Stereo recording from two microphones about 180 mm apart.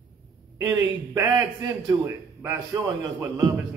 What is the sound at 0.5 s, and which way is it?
Speech, 20° right (ahead or behind).